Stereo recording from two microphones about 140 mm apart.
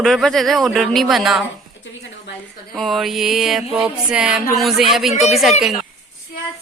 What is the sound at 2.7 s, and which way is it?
A woman's voice, centre (ahead or behind).